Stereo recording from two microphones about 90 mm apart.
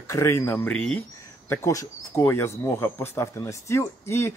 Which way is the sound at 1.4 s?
30° left (ahead or behind).